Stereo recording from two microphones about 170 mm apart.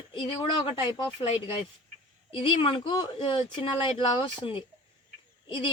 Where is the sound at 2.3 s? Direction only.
30° left (ahead or behind).